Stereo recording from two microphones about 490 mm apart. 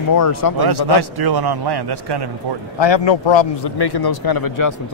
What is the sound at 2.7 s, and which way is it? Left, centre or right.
A man's voice, left.